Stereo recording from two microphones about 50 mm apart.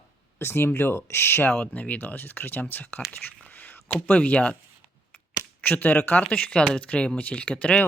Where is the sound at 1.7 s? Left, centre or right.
Left.